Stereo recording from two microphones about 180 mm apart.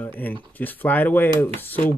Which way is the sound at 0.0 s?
10° left (ahead or behind).